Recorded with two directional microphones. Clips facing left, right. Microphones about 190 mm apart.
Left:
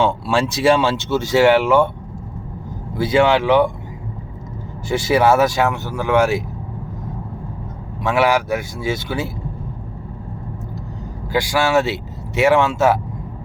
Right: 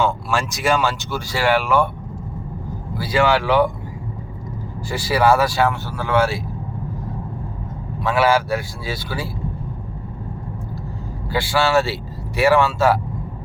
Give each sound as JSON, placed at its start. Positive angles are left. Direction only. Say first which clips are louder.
{"t": 0.0, "sound": "speech", "louder": "left 3 dB", "side_deg": 30}
{"t": 3.0, "sound": "speech", "louder": "left 3 dB", "side_deg": 25}
{"t": 4.9, "sound": "speech", "louder": "left 2 dB", "side_deg": 20}
{"t": 8.0, "sound": "speech", "louder": "left 1 dB", "side_deg": 20}
{"t": 11.3, "sound": "a man's voice", "louder": "left 1 dB", "side_deg": 15}